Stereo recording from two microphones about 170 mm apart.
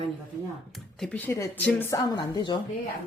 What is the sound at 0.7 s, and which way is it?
Speech, 5° left (ahead or behind).